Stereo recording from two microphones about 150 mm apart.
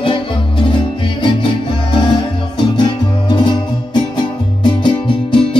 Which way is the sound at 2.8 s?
30° left (ahead or behind).